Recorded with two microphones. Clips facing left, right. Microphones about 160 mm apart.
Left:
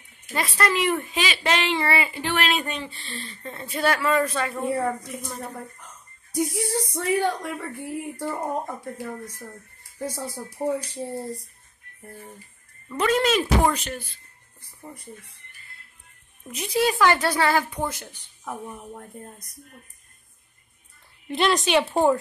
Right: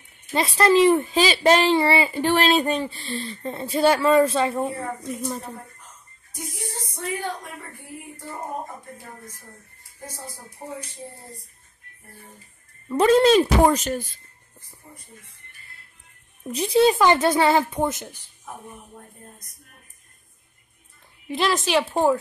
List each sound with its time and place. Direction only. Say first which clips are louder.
0.3 s speech: right 6 dB; 25° right (ahead or behind)
6.3 s speech: left 10 dB; 75° left (ahead or behind)
8.8 s speech: left 8 dB; 75° left (ahead or behind)
10.6 s speech: left 11 dB; 90° left
12.8 s speech: right 6 dB; 30° right (ahead or behind)
16.4 s a woman's voice: right 6 dB; 30° right (ahead or behind)
21.3 s a woman's voice: left 1 dB; centre (ahead or behind)